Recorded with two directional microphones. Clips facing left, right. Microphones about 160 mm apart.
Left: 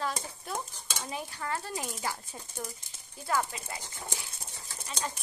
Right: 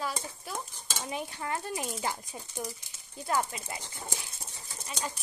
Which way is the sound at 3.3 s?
20° right (ahead or behind).